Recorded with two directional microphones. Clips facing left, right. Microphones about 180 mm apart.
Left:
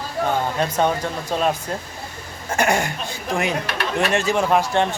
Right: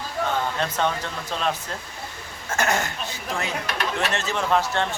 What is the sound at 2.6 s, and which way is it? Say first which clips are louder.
Speech: left 4 dB; 15° left (ahead or behind).